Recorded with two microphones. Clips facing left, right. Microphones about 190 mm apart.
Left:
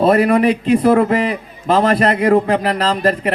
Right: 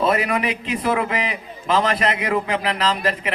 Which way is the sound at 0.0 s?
45° left (ahead or behind).